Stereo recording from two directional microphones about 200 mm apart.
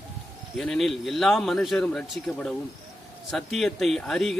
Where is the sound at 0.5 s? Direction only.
Centre (ahead or behind).